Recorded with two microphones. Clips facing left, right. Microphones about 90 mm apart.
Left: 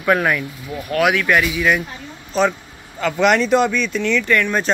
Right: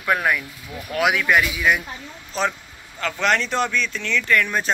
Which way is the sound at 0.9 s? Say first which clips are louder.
Left 3 dB; 15° right (ahead or behind).